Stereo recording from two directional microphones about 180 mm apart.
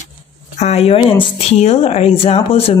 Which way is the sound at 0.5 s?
35° left (ahead or behind).